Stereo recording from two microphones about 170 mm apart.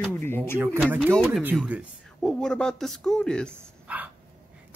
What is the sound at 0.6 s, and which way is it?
Speech, 10° right (ahead or behind).